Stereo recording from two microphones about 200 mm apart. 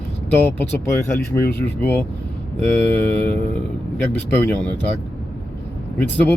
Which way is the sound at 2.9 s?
5° left (ahead or behind).